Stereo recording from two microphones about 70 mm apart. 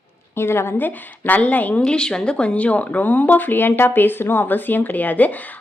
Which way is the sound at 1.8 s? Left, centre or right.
Centre.